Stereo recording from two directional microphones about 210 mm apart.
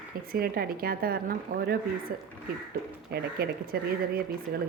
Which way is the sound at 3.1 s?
45° right (ahead or behind).